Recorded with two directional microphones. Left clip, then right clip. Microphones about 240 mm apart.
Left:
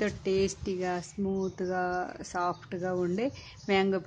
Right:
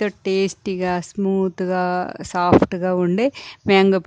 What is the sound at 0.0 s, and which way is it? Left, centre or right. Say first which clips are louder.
Speech: right 8 dB; right.